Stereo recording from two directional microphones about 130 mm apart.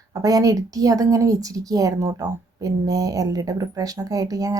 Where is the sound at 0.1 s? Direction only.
25° right (ahead or behind).